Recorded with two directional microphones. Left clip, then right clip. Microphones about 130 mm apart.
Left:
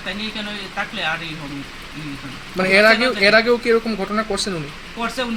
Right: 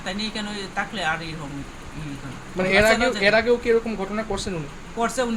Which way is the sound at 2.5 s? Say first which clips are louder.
Left 5 dB; 80° left.